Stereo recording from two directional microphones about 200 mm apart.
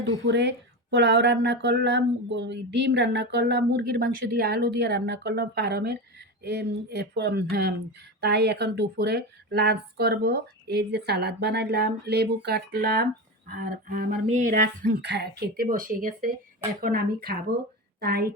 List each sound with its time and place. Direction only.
0.3 s speech: 60° right (ahead or behind)